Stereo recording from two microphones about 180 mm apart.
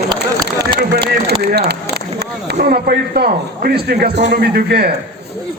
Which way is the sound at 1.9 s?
65° right (ahead or behind).